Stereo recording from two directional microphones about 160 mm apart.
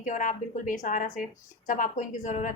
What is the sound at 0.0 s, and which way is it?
A woman's voice, 55° left (ahead or behind).